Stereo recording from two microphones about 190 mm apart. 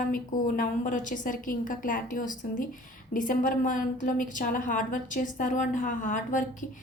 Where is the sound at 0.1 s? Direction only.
45° left (ahead or behind).